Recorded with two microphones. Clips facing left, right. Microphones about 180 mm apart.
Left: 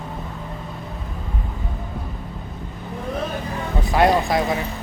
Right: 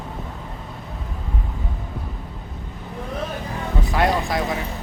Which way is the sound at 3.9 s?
20° left (ahead or behind).